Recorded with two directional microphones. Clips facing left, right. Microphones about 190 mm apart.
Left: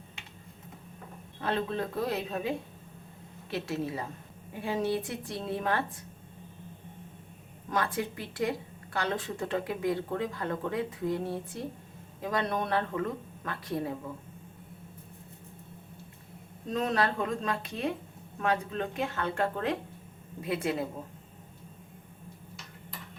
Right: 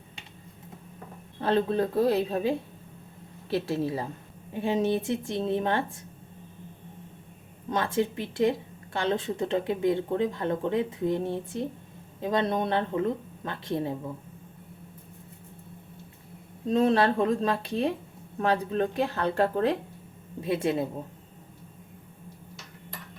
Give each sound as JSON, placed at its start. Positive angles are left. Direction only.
{"t": 1.4, "sound": "a woman's voice", "side_deg": -35}
{"t": 7.7, "sound": "a woman's voice", "side_deg": -25}
{"t": 16.6, "sound": "a woman's voice", "side_deg": -30}
{"t": 20.4, "sound": "a woman's voice", "side_deg": -25}